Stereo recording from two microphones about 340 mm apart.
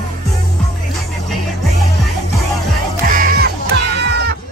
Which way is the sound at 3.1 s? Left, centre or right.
Right.